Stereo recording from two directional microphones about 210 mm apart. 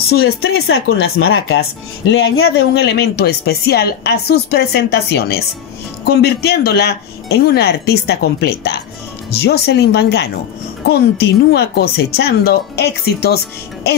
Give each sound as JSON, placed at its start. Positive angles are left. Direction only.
{"t": 0.4, "sound": "speech", "side_deg": 75}
{"t": 2.0, "sound": "speech", "side_deg": 65}
{"t": 2.4, "sound": "a woman's voice", "side_deg": 50}